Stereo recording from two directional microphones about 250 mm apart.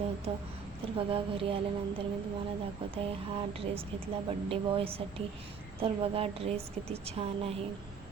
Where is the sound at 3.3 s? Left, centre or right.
Right.